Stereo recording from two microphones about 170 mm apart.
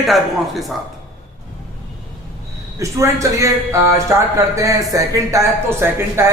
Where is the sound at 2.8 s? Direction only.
15° right (ahead or behind).